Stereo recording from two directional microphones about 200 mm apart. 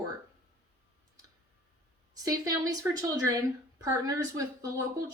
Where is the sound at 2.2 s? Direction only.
20° right (ahead or behind).